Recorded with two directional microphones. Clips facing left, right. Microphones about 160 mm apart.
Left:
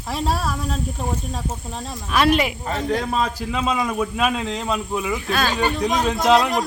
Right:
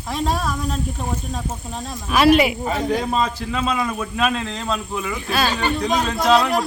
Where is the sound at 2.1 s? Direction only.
5° right (ahead or behind).